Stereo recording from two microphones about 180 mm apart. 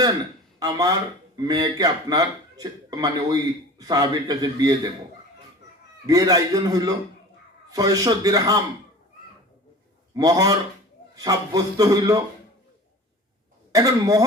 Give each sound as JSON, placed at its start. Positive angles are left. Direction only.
{"t": 0.6, "sound": "a man's voice", "side_deg": -20}
{"t": 6.1, "sound": "a man's voice", "side_deg": -20}
{"t": 10.2, "sound": "a man's voice", "side_deg": -20}
{"t": 13.7, "sound": "a man's voice", "side_deg": -20}